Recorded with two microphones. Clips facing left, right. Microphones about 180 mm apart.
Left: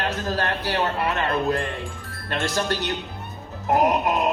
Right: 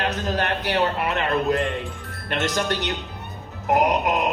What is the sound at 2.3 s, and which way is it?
Speech, 20° right (ahead or behind).